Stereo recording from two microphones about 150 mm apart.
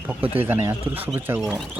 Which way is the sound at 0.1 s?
15° right (ahead or behind).